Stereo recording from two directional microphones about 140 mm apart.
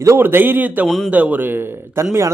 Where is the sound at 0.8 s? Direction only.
Centre (ahead or behind).